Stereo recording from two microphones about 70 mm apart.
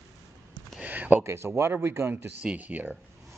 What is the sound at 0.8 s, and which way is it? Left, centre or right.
Speech, right.